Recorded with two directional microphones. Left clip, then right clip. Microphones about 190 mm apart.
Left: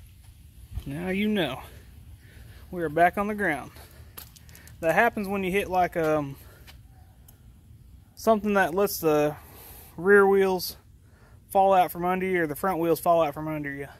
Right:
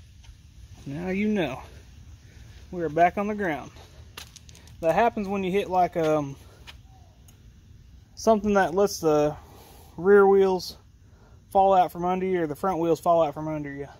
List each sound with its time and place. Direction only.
0.8 s speech: centre (ahead or behind)
2.7 s speech: centre (ahead or behind)
8.2 s speech: 15° right (ahead or behind)